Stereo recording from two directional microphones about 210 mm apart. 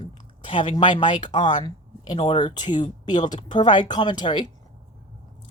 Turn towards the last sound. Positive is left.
turn(degrees=20)  # may be behind; listen again after turning